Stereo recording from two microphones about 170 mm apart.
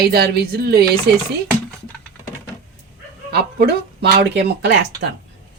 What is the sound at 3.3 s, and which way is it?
Speech, 70° right (ahead or behind).